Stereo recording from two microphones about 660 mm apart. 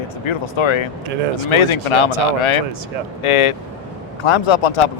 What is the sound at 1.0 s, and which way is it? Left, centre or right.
Speech, right.